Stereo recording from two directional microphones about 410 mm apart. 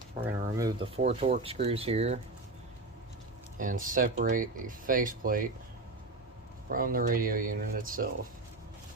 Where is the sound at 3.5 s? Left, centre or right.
Centre.